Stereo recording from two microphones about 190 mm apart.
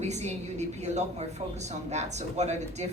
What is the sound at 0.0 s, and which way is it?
Speech, 35° right (ahead or behind).